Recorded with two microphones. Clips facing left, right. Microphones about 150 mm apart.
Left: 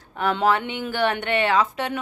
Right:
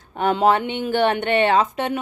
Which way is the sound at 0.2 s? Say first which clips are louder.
Right 3 dB; 25° right (ahead or behind).